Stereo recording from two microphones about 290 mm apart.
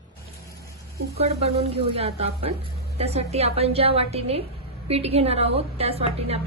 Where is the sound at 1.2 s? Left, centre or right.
Centre.